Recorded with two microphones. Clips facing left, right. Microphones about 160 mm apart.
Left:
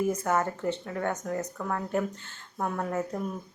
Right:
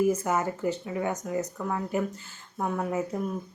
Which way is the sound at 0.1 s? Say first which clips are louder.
Right 1 dB; 10° right (ahead or behind).